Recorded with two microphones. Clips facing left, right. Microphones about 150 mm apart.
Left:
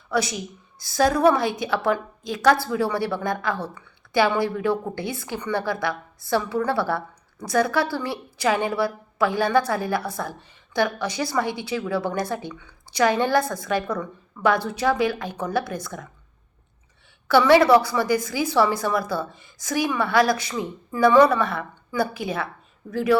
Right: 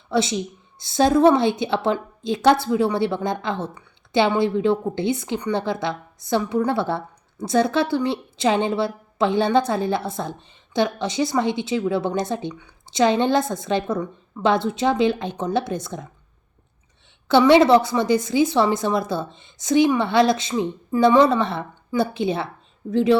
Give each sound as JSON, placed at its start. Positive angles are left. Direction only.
{"t": 0.1, "sound": "a woman's voice", "side_deg": -25}
{"t": 17.2, "sound": "a woman's voice", "side_deg": -20}